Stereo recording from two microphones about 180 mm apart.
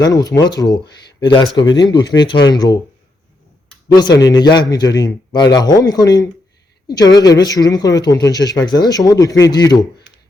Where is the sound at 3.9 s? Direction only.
25° left (ahead or behind).